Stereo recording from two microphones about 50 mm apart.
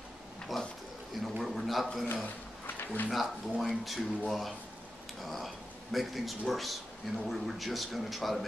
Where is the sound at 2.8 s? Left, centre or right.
Left.